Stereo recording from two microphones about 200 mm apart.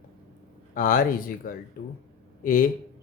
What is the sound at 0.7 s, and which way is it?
Speech, 45° left (ahead or behind).